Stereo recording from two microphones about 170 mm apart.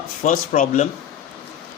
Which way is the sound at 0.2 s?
45° left (ahead or behind).